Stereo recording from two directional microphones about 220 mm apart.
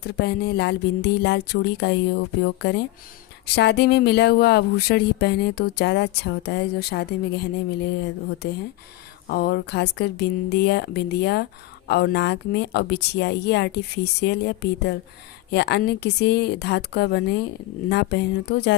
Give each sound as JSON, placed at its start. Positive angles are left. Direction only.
{"t": 0.0, "sound": "speech", "side_deg": 50}
{"t": 8.4, "sound": "speech", "side_deg": 50}